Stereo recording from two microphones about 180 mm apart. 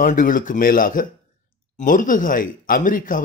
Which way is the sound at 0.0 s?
50° left (ahead or behind).